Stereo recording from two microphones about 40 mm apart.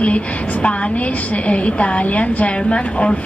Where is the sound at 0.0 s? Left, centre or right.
Left.